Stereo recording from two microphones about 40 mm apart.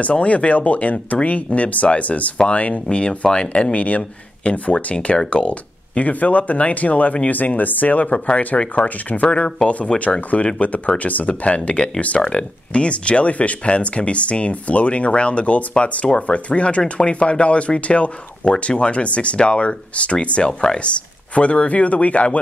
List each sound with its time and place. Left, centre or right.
0.0 s speech: left
9.9 s speech: centre
10.3 s speech: left
21.4 s speech: left